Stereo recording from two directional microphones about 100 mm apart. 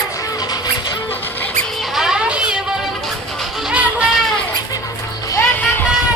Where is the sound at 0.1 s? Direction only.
35° left (ahead or behind).